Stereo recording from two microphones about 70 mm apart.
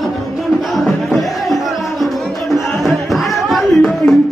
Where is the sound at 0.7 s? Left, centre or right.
Centre.